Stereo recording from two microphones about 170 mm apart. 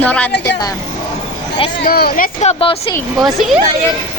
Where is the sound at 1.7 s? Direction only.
65° left (ahead or behind).